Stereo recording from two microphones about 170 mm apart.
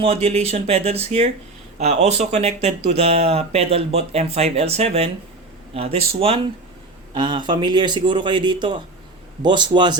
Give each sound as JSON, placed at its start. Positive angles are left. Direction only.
{"t": 0.0, "sound": "a man's voice", "side_deg": -35}